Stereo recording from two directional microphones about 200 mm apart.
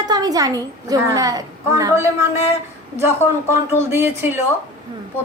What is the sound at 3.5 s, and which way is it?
Speech, 15° right (ahead or behind).